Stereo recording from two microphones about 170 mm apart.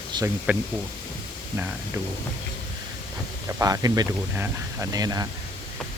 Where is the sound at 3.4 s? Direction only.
20° right (ahead or behind).